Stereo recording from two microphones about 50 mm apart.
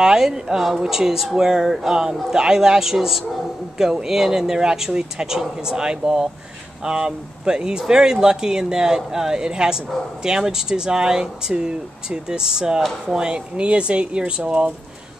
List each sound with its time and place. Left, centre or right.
0.0 s speech: centre